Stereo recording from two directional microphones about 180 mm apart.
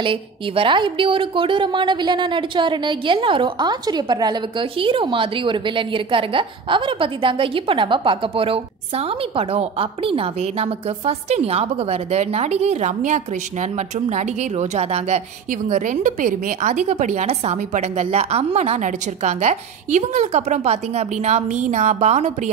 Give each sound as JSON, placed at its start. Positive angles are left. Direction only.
{"t": 0.0, "sound": "a woman's voice", "side_deg": -30}